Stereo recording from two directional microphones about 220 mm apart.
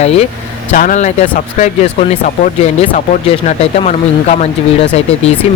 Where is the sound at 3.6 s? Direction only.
30° left (ahead or behind).